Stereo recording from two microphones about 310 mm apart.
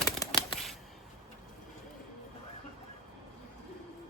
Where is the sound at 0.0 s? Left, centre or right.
Centre.